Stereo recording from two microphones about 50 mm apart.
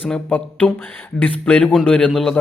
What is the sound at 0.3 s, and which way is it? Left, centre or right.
Speech, left.